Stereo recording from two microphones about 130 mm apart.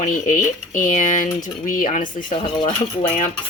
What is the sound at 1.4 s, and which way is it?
Cutlery, 90° left.